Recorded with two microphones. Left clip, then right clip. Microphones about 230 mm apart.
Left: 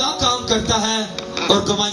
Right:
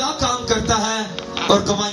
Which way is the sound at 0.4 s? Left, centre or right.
Right.